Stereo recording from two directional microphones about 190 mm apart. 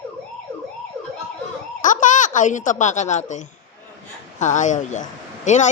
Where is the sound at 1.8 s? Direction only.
40° left (ahead or behind).